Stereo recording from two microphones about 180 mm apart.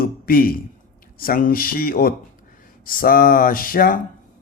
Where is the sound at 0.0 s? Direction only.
55° left (ahead or behind).